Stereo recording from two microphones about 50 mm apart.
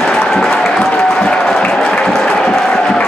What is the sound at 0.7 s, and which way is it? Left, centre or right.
Applause, left.